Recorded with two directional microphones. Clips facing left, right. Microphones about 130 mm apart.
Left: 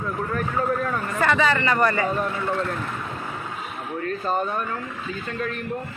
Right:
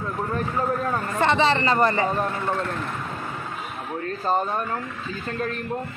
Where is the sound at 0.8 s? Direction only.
30° right (ahead or behind).